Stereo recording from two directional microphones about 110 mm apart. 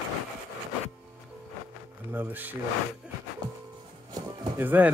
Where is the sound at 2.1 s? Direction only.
15° right (ahead or behind).